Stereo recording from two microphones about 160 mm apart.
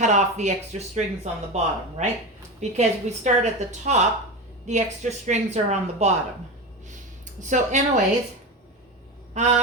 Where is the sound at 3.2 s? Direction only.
45° right (ahead or behind).